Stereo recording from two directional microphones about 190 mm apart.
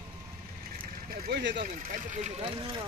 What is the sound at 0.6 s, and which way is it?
Speech, 50° right (ahead or behind).